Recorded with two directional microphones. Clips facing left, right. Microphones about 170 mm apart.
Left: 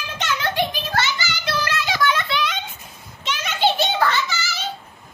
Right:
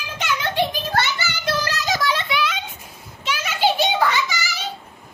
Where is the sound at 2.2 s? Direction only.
10° right (ahead or behind).